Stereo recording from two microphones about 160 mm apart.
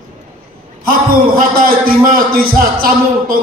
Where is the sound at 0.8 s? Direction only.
65° right (ahead or behind).